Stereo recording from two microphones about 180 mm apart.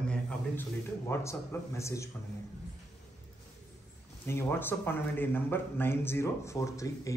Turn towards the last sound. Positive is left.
turn(degrees=20)  # may be behind; listen again after turning